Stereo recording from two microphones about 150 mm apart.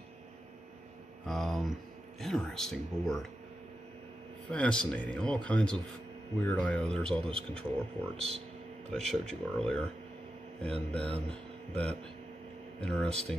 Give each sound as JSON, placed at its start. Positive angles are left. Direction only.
{"t": 1.2, "sound": "speech", "side_deg": 0}
{"t": 4.5, "sound": "speech", "side_deg": 5}
{"t": 7.2, "sound": "a man's voice", "side_deg": -40}
{"t": 8.9, "sound": "speech", "side_deg": 5}